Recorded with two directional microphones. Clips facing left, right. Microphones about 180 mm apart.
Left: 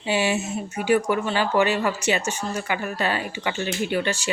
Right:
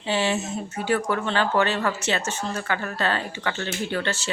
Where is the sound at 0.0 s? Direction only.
10° left (ahead or behind).